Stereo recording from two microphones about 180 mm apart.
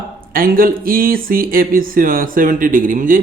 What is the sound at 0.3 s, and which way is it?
Speech, 55° right (ahead or behind).